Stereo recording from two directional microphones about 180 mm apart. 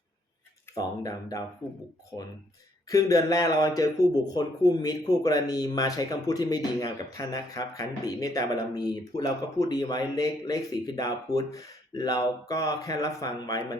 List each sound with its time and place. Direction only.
0.8 s speech: 20° left (ahead or behind)
2.9 s speech: 20° left (ahead or behind)